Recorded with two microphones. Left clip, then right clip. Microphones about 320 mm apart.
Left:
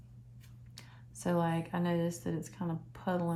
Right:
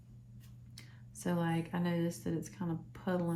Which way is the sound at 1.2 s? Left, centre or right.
Centre.